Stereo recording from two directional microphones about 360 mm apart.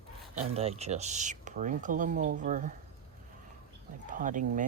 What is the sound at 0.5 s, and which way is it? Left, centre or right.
Speech, centre.